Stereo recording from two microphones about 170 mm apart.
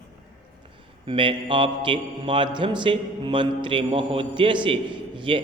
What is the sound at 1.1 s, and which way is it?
Mantra, 30° right (ahead or behind).